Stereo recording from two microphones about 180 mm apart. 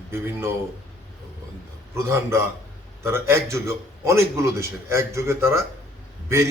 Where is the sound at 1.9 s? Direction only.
15° right (ahead or behind).